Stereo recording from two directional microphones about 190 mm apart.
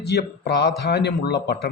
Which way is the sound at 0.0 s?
60° left (ahead or behind).